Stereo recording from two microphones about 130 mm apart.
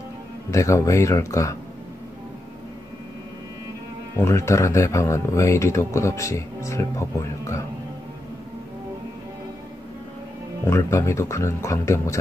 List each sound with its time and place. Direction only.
0.5 s speech: 25° left (ahead or behind)
4.2 s speech: 20° left (ahead or behind)
10.7 s speech: 20° left (ahead or behind)